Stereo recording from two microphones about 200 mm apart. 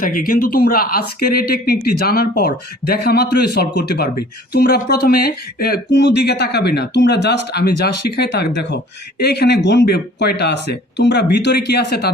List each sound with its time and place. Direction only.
0.0 s speech: 45° left (ahead or behind)